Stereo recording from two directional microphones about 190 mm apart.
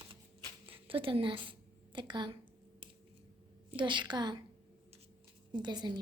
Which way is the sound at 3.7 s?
25° right (ahead or behind).